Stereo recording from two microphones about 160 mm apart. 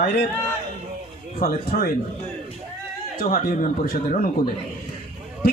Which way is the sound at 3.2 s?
60° left (ahead or behind).